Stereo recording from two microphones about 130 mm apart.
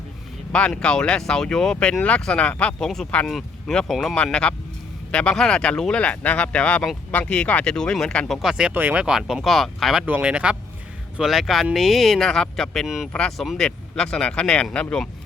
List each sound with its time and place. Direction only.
0.5 s speech: 5° left (ahead or behind)
8.4 s speech: 5° right (ahead or behind)